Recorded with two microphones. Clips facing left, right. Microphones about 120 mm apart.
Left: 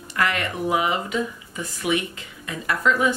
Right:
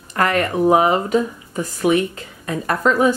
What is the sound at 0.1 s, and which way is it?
Speech, 40° right (ahead or behind).